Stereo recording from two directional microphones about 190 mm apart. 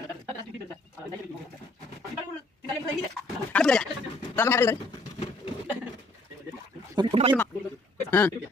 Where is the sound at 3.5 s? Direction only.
5° left (ahead or behind).